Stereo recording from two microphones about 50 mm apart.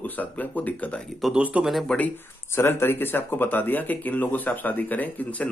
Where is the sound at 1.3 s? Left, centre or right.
Right.